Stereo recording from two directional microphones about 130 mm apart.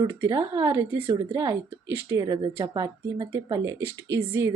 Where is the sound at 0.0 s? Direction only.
20° right (ahead or behind).